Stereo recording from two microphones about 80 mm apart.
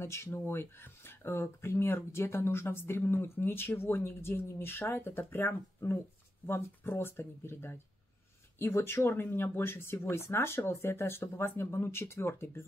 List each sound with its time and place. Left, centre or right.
0.0 s speech: left